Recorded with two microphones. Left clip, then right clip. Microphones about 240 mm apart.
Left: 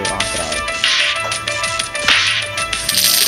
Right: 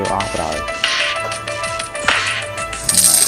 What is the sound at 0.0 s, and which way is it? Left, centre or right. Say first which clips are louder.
Music: right 1 dB; centre.